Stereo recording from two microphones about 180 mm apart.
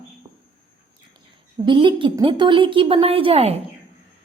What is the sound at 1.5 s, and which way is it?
A woman's voice, 25° right (ahead or behind).